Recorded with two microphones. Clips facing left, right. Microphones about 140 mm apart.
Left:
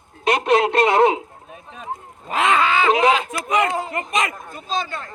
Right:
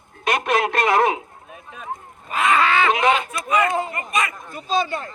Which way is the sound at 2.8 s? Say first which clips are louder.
Left 2 dB; 35° left (ahead or behind).